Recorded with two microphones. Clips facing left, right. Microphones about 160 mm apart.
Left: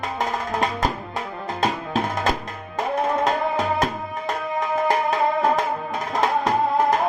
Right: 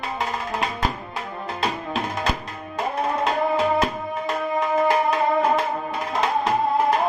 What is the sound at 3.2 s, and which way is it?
Tabla, 45° left (ahead or behind).